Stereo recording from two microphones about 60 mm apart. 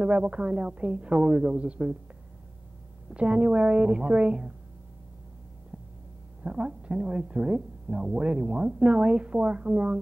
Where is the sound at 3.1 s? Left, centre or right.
Centre.